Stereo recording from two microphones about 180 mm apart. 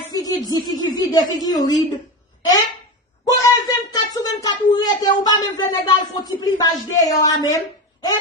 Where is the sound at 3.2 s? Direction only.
20° left (ahead or behind).